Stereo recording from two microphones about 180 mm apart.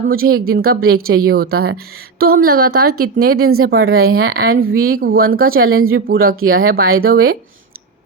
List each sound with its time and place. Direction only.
0.1 s speech: 55° right (ahead or behind)